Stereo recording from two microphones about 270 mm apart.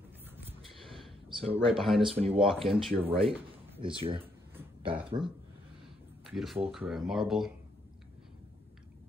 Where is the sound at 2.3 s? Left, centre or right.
Centre.